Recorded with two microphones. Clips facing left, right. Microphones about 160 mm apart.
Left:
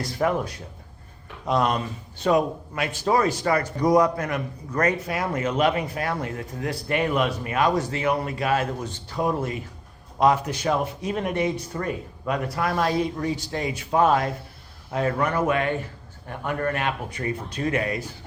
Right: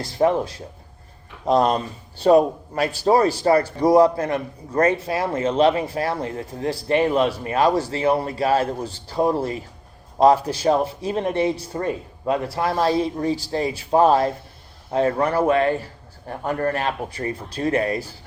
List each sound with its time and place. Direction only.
0.0 s speech: 30° right (ahead or behind)